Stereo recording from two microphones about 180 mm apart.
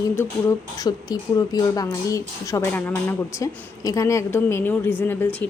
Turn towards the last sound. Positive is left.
turn(degrees=10)  # may be behind; listen again after turning